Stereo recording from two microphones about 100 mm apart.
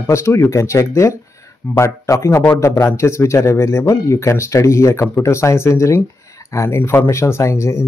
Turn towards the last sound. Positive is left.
turn(degrees=30)  # may be behind; listen again after turning